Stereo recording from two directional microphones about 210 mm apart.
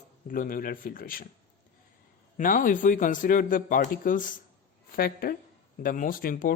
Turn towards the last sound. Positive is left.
turn(degrees=40)  # may be behind; listen again after turning